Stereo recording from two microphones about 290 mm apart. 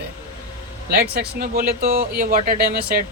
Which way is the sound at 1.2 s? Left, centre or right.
Right.